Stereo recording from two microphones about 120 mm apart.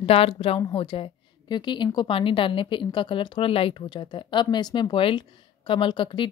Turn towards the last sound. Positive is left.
turn(degrees=45)  # may be behind; listen again after turning